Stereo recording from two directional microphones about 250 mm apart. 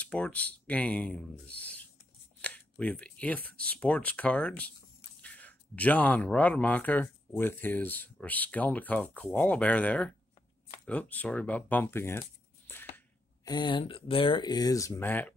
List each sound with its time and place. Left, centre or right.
0.0 s speech: centre